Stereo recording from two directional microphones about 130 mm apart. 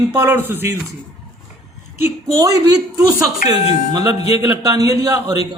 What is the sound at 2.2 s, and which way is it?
A woman's voice, 25° right (ahead or behind).